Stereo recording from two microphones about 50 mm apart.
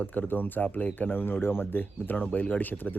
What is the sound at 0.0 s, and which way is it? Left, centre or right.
Speech, left.